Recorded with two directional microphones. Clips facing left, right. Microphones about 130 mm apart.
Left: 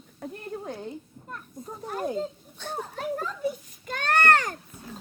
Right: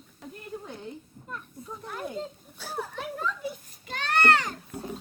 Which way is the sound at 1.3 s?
45° left (ahead or behind).